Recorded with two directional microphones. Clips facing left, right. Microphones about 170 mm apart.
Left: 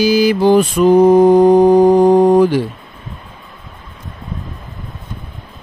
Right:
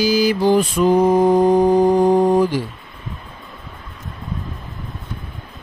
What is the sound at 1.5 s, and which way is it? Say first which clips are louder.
Mantra: left 5 dB; 75° left (ahead or behind).